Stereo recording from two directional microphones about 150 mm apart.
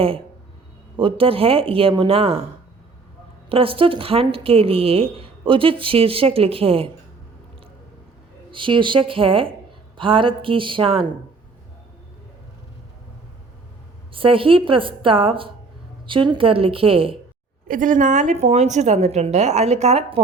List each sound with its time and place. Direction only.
0.9 s speech: 35° right (ahead or behind)
3.5 s speech: 35° right (ahead or behind)
8.4 s speech: 35° right (ahead or behind)
14.1 s speech: 35° right (ahead or behind)
17.7 s speech: 60° right (ahead or behind); by 20.2 s 45° right (ahead or behind)